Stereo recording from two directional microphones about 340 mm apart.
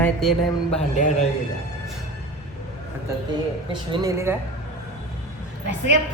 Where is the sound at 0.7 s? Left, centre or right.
Left.